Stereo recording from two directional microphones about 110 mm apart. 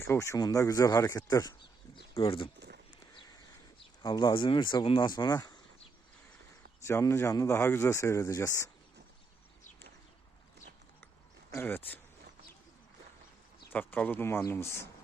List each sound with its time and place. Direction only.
0.1 s speech: 25° left (ahead or behind)
2.1 s speech: 55° left (ahead or behind)
3.8 s speech: 45° left (ahead or behind)
6.8 s speech: 25° left (ahead or behind)
11.5 s speech: 20° left (ahead or behind)
13.7 s speech: 15° left (ahead or behind)